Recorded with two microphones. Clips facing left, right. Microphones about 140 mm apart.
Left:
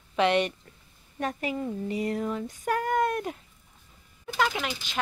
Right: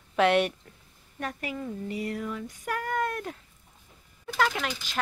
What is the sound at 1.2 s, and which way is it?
Speech, 25° left (ahead or behind).